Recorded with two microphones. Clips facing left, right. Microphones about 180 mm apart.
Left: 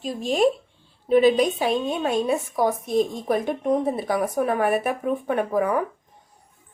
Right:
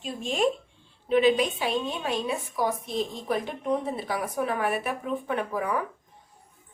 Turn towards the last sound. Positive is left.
turn(degrees=50)  # may be behind; listen again after turning